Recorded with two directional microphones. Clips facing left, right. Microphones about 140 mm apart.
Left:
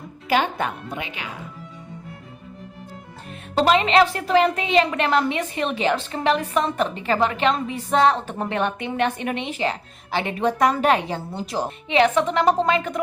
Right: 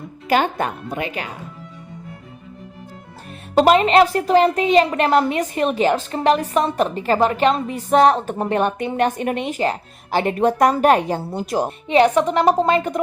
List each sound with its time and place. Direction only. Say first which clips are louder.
0.3 s a woman's voice: right 3 dB; 45° right (ahead or behind)
3.5 s a woman's voice: right 4 dB; 45° right (ahead or behind)